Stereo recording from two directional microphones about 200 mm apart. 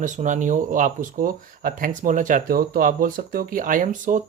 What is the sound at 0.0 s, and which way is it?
Speech, 40° right (ahead or behind).